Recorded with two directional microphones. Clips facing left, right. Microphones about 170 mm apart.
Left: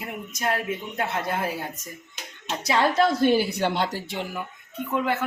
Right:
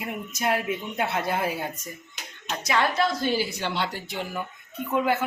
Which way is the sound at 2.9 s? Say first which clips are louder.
Left 5 dB; 55° left (ahead or behind).